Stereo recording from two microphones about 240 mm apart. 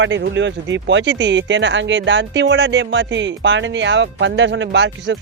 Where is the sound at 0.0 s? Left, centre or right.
Right.